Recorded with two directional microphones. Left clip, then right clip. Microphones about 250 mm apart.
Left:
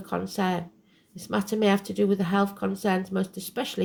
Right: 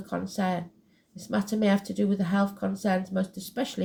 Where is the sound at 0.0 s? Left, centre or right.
Left.